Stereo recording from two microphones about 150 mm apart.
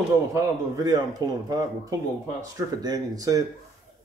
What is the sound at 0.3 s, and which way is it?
Speech, 20° right (ahead or behind).